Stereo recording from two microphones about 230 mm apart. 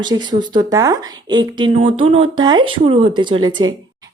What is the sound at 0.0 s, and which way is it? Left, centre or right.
Speech, centre.